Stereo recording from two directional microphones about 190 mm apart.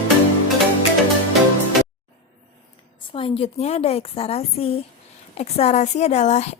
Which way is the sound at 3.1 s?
30° left (ahead or behind).